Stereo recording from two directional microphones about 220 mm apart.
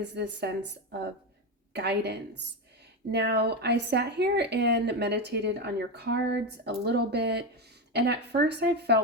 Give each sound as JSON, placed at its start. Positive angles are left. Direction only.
{"t": 0.0, "sound": "speech", "side_deg": -50}